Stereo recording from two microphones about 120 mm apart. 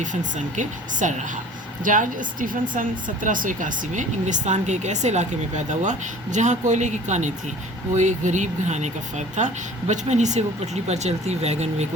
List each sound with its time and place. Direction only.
0.0 s speech: 90° right; by 11.9 s 70° right (ahead or behind)